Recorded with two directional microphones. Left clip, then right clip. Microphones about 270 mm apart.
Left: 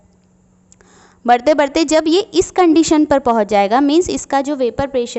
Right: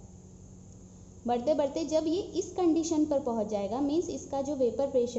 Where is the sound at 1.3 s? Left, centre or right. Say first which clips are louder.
Left 16 dB; left.